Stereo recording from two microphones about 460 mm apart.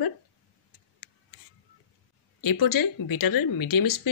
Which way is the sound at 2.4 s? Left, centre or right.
Left.